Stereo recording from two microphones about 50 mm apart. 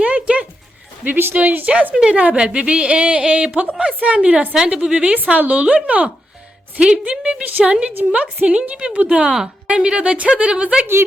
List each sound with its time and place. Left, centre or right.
0.0 s a sound: right
1.0 s a woman's voice: right; by 5.1 s centre
5.1 s a woman's voice: right
6.7 s a woman's voice: centre